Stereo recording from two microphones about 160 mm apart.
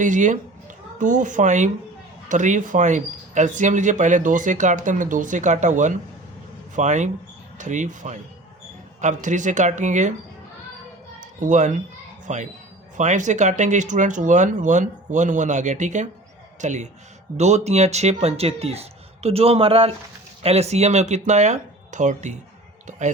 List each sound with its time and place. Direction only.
0.0 s speech: 50° right (ahead or behind)
11.3 s speech: 50° right (ahead or behind)